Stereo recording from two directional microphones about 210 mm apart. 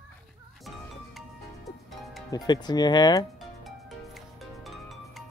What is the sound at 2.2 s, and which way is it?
Speech, 20° left (ahead or behind).